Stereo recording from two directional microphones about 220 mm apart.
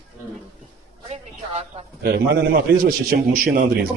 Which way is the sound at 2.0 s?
45° right (ahead or behind).